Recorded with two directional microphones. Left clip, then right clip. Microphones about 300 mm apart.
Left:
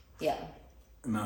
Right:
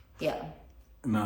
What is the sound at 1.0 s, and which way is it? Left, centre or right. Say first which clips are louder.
Speech: right 4 dB; right.